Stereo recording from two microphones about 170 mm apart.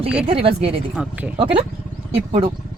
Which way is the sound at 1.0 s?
5° right (ahead or behind).